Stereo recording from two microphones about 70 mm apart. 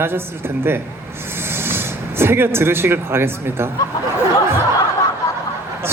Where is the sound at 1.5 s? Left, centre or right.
Right.